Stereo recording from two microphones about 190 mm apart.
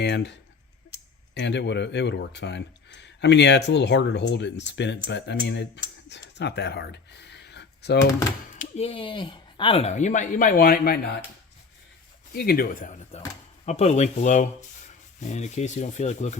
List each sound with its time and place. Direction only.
0.0 s speech: 65° left (ahead or behind)
8.5 s speech: 35° left (ahead or behind); by 11.1 s 55° left (ahead or behind)
12.3 s speech: 55° left (ahead or behind)
13.7 s speech: 35° left (ahead or behind)